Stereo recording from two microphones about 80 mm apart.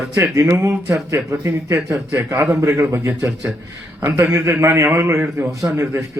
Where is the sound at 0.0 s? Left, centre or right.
Right.